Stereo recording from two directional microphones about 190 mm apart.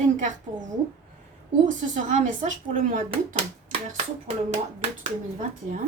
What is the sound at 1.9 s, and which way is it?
Speech, 40° right (ahead or behind).